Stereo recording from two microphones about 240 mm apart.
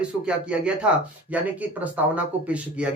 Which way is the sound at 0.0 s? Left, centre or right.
Centre.